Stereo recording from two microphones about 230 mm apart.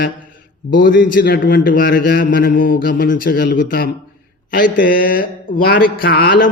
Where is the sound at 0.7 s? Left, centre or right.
Left.